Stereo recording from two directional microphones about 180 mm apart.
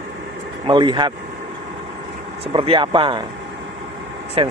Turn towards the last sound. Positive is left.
turn(degrees=-30)  # may be behind; listen again after turning